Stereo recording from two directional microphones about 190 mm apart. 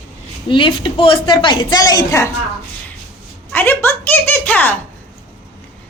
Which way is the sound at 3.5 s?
10° left (ahead or behind).